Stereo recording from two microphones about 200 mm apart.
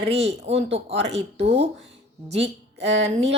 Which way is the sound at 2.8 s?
65° right (ahead or behind).